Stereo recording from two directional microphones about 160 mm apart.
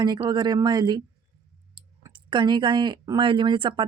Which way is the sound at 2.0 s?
30° right (ahead or behind).